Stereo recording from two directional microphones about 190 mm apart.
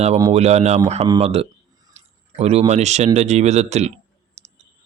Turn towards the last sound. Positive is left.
turn(degrees=-35)  # may be behind; listen again after turning